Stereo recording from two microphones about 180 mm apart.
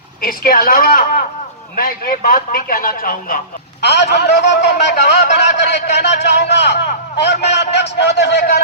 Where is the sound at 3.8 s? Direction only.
70° left (ahead or behind).